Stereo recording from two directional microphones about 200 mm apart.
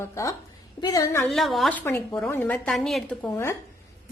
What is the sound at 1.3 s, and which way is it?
A woman's voice, centre (ahead or behind).